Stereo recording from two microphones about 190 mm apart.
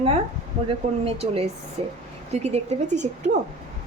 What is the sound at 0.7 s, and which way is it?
A woman's voice, 30° right (ahead or behind).